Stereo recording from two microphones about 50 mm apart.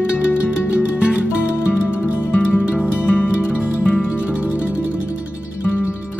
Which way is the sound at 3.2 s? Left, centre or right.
Right.